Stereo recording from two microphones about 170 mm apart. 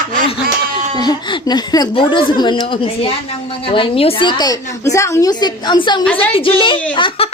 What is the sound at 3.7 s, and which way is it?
A woman's voice, 35° left (ahead or behind).